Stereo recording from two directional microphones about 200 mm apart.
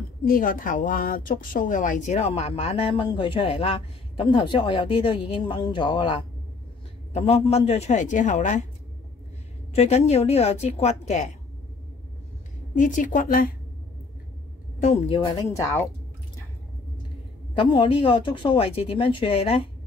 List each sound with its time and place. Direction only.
0.2 s a woman's voice: 45° left (ahead or behind)
9.8 s a woman's voice: 30° left (ahead or behind)
12.7 s a woman's voice: 40° left (ahead or behind)
14.8 s a woman's voice: 35° left (ahead or behind)
15.3 s speech: 15° left (ahead or behind)
17.6 s speech: 25° left (ahead or behind)